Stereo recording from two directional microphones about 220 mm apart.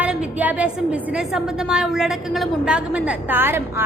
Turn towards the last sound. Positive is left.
turn(degrees=-10)  # may be behind; listen again after turning